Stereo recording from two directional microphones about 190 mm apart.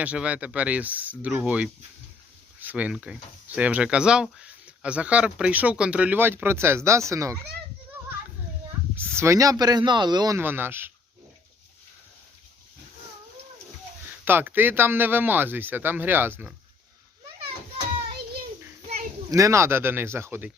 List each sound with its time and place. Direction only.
0.0 s speech: 5° right (ahead or behind)
9.0 s speech: 15° right (ahead or behind)
14.3 s speech: 10° right (ahead or behind)
19.3 s speech: 15° right (ahead or behind)